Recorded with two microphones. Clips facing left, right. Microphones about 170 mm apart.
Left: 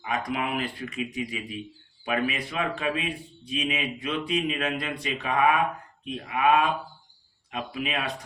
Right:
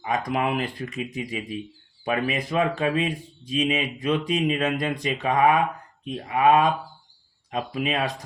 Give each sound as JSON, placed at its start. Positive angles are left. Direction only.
{"t": 0.0, "sound": "speech", "side_deg": -40}